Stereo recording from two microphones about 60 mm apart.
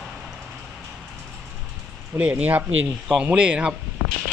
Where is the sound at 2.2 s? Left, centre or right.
Centre.